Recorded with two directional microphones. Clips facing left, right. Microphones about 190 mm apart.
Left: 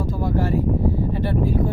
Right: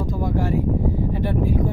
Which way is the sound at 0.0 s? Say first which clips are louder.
Left 1 dB; 15° right (ahead or behind).